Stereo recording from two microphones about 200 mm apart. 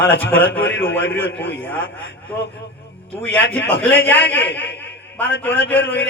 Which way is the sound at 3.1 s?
10° left (ahead or behind).